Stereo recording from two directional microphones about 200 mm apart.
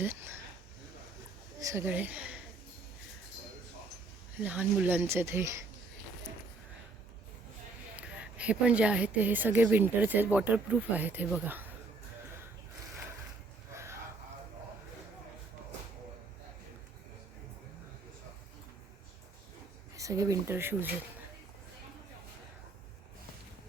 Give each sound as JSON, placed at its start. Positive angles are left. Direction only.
{"t": 0.0, "sound": "speech", "side_deg": -10}
{"t": 1.6, "sound": "a woman's voice", "side_deg": -10}
{"t": 4.4, "sound": "a woman's voice", "side_deg": -5}
{"t": 7.9, "sound": "a woman's voice", "side_deg": -5}
{"t": 13.7, "sound": "a sound", "side_deg": -15}
{"t": 20.0, "sound": "a woman's voice", "side_deg": -15}